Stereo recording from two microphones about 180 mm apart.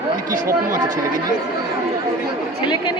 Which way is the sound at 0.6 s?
45° right (ahead or behind).